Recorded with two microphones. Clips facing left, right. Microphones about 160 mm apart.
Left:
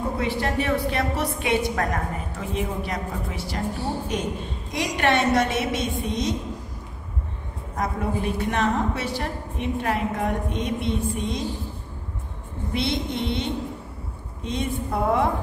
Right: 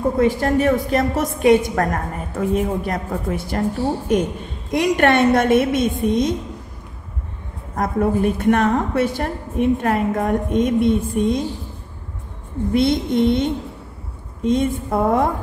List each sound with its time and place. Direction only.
0.2 s a woman's voice: 45° right (ahead or behind)
7.7 s a woman's voice: 55° right (ahead or behind)
12.7 s a woman's voice: 50° right (ahead or behind)